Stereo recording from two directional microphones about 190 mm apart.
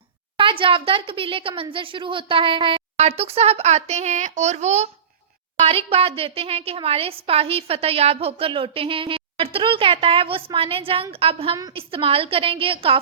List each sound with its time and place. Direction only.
0.3 s a woman's voice: 25° right (ahead or behind)